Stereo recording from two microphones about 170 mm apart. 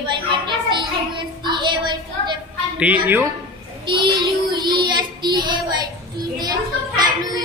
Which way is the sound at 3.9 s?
30° right (ahead or behind).